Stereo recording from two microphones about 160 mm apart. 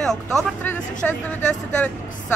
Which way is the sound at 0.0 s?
5° left (ahead or behind).